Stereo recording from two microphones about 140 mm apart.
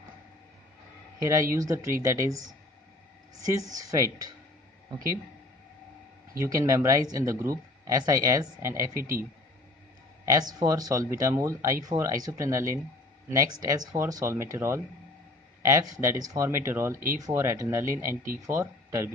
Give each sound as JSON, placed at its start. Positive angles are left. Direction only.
{"t": 1.2, "sound": "speech", "side_deg": -20}
{"t": 6.4, "sound": "speech", "side_deg": -20}
{"t": 10.2, "sound": "speech", "side_deg": -25}